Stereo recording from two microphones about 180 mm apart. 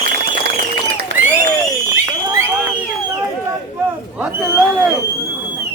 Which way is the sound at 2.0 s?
20° right (ahead or behind).